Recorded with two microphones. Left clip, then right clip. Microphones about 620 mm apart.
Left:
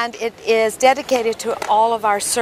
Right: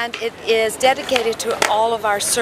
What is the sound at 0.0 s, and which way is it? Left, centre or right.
Speech, left.